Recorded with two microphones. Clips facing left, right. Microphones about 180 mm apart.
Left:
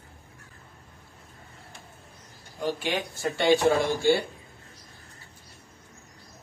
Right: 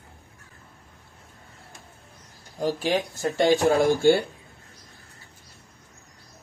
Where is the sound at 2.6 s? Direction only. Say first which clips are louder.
Right 4 dB; 40° right (ahead or behind).